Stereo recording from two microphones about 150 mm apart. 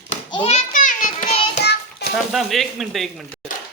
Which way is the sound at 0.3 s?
35° left (ahead or behind).